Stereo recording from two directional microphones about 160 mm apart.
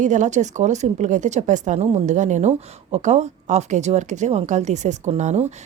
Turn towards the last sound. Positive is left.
turn(degrees=-45)  # may be behind; listen again after turning